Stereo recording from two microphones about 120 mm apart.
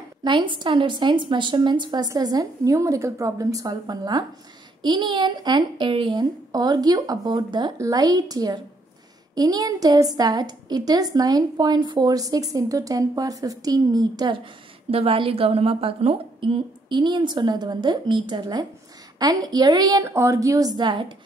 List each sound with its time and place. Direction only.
0.2 s a woman's voice: 40° right (ahead or behind)
14.9 s a woman's voice: 50° right (ahead or behind); by 20.1 s 35° right (ahead or behind)
20.1 s a woman's voice: 20° right (ahead or behind); by 21.1 s 40° right (ahead or behind)